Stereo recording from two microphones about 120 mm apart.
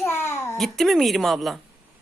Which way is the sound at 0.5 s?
Centre (ahead or behind).